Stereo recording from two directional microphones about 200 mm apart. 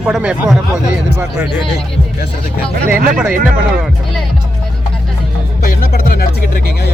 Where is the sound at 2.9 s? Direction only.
5° right (ahead or behind).